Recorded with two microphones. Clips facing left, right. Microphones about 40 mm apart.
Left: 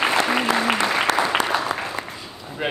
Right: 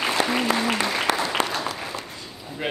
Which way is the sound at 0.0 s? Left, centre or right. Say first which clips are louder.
Left 3 dB; left.